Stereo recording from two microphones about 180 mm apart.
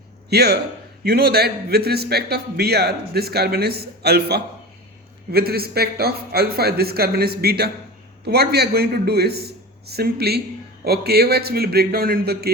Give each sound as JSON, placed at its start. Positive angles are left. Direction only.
{"t": 0.3, "sound": "a man's voice", "side_deg": -65}